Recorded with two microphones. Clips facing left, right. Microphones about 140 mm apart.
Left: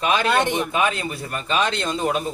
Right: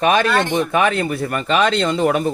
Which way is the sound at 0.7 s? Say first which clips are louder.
Right 5 dB; 70° right (ahead or behind).